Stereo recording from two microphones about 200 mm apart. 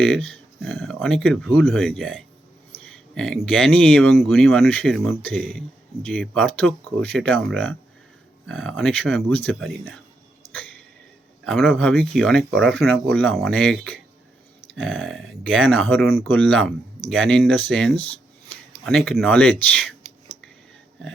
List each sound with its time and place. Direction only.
0.0 s speech: 5° left (ahead or behind)
10.4 s a sound: 25° left (ahead or behind)
11.4 s speech: 5° left (ahead or behind)